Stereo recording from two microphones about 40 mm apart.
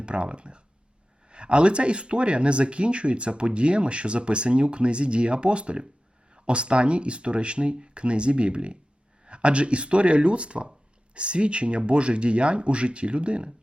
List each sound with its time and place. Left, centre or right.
0.0 s speech: right